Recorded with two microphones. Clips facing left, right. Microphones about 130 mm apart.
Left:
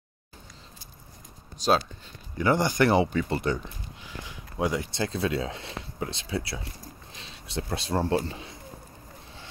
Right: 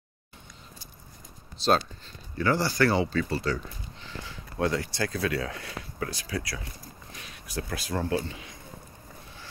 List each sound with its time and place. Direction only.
2.3 s speech: 20° left (ahead or behind); by 8.5 s 35° left (ahead or behind)